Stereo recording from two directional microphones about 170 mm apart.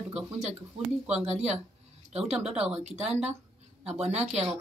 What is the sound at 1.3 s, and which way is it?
Speech, 40° right (ahead or behind).